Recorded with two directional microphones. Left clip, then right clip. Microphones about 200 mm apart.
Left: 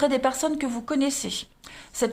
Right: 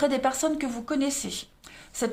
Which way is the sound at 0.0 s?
20° left (ahead or behind).